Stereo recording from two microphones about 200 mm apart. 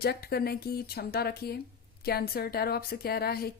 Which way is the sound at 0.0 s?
50° left (ahead or behind).